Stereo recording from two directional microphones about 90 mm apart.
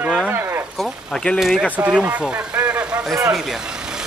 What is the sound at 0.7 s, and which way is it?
Speech, 5° left (ahead or behind).